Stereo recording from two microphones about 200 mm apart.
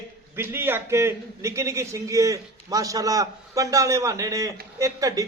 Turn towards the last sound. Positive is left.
turn(degrees=-15)  # may be behind; listen again after turning